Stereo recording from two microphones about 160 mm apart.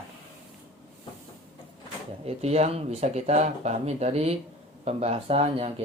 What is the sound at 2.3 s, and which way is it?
Speech, 40° right (ahead or behind).